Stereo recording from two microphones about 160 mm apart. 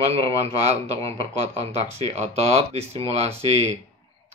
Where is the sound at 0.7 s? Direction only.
40° right (ahead or behind).